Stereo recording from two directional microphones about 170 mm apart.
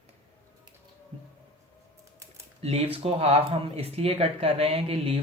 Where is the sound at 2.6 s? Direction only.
35° right (ahead or behind).